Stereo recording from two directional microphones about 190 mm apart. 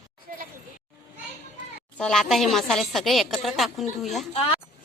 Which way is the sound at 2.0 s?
5° left (ahead or behind).